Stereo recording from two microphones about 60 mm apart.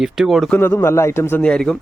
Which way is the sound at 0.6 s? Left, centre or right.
Left.